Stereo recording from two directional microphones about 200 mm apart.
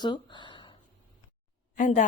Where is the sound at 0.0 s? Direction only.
20° left (ahead or behind).